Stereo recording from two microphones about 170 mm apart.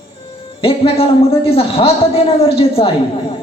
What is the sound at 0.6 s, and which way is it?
A man's voice, 35° left (ahead or behind).